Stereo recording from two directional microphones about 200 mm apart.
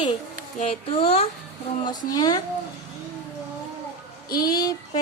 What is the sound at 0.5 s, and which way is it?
Speech, 30° left (ahead or behind).